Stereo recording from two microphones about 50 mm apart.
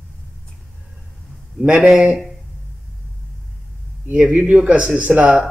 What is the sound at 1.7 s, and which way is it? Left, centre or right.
Speech, centre.